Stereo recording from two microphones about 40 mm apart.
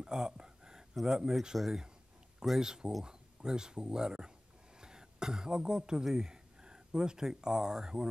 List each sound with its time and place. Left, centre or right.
0.0 s a sound: centre
1.0 s speech: centre
2.6 s speech: centre